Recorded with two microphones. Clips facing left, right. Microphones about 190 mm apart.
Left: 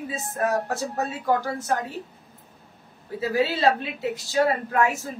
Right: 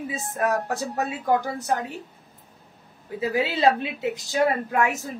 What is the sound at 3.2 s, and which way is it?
A woman's voice, 20° right (ahead or behind).